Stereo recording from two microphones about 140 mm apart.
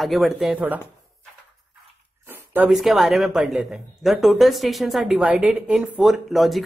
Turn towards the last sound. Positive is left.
turn(degrees=0)  # may be behind; listen again after turning